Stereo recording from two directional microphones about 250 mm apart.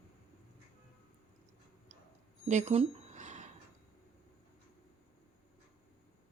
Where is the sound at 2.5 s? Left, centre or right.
Right.